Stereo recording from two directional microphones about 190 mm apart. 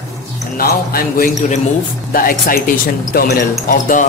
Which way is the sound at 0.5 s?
50° left (ahead or behind).